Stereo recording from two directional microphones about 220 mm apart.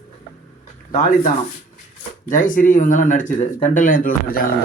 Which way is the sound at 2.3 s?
35° left (ahead or behind).